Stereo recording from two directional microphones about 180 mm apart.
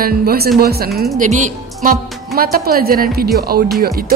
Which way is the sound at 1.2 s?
45° right (ahead or behind).